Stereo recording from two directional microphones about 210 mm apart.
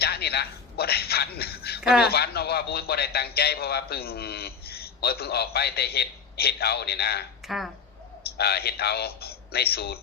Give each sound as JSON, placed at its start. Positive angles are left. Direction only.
{"t": 0.0, "sound": "a sound", "side_deg": 50}
{"t": 2.0, "sound": "a man's voice", "side_deg": 50}
{"t": 7.4, "sound": "speech", "side_deg": 0}
{"t": 8.4, "sound": "speech", "side_deg": 50}